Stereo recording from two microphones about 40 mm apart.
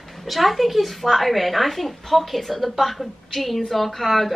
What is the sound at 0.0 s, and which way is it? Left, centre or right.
A woman's voice, centre.